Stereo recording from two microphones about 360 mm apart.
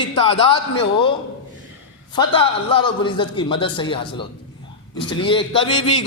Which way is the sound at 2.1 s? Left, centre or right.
Centre.